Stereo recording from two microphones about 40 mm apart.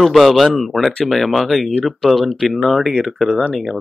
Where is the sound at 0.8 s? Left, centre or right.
Centre.